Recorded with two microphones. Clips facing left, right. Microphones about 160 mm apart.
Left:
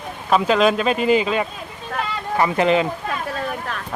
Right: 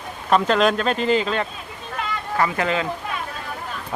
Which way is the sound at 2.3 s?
20° left (ahead or behind).